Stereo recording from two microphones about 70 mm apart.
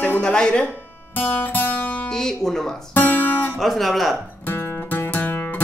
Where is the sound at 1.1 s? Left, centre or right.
Left.